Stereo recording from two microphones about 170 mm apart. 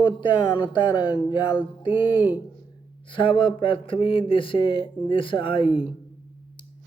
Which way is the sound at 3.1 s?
30° left (ahead or behind).